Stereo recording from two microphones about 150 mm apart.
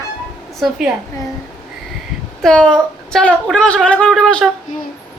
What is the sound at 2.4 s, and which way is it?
A woman's voice, 5° left (ahead or behind).